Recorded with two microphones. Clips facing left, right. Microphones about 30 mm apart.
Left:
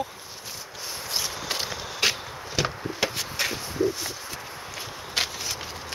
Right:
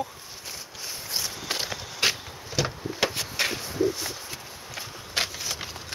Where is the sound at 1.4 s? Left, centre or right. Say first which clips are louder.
Left 1 dB; centre.